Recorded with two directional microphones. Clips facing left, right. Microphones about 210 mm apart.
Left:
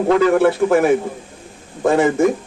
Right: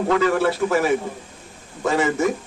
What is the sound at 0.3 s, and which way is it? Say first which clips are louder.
A man's voice: left 6 dB; 55° left (ahead or behind).